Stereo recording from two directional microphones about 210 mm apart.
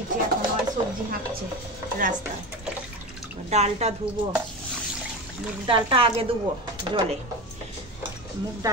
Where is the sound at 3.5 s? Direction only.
30° right (ahead or behind).